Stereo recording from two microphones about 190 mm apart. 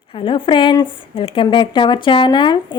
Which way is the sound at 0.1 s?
30° left (ahead or behind).